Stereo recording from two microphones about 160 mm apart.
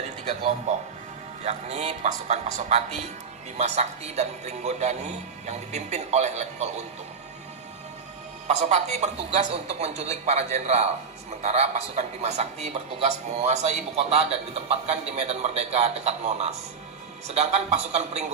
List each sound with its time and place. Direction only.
0.2 s a man's voice: 40° right (ahead or behind)
8.5 s a man's voice: 45° right (ahead or behind)